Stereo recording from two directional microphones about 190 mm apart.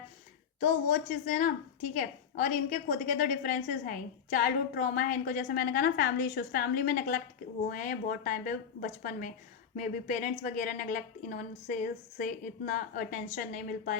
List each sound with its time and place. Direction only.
0.6 s a woman's voice: 40° left (ahead or behind)